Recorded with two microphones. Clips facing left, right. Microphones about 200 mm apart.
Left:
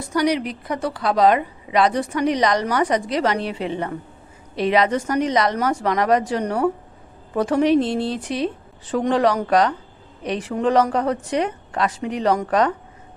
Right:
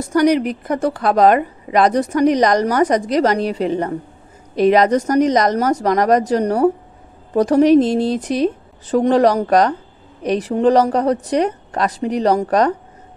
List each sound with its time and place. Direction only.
0.0 s a woman's voice: 45° right (ahead or behind)